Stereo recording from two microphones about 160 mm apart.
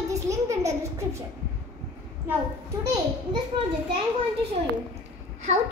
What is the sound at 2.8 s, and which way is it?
Speech, 20° right (ahead or behind).